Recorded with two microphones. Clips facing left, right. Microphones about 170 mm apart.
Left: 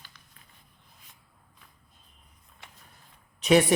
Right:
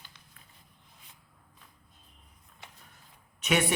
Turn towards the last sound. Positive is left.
turn(degrees=35)  # may be behind; listen again after turning